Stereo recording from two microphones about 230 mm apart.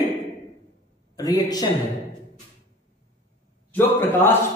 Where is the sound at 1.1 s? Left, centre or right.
Centre.